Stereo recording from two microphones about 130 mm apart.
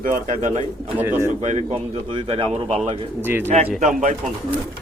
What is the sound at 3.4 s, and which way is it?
Speech, 60° right (ahead or behind).